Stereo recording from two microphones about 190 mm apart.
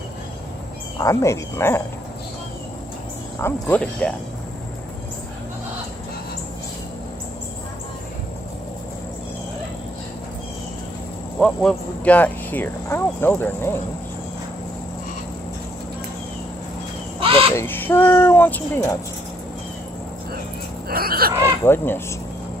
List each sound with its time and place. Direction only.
0.9 s speech: 15° left (ahead or behind)
3.4 s speech: 5° left (ahead or behind)
11.3 s speech: 5° left (ahead or behind)
17.2 s honk: 30° right (ahead or behind)
17.5 s speech: 10° left (ahead or behind)
20.9 s a sound: 50° right (ahead or behind)
21.6 s speech: 10° left (ahead or behind)